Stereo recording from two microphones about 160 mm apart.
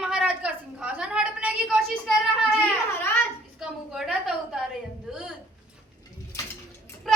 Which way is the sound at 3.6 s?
Centre (ahead or behind).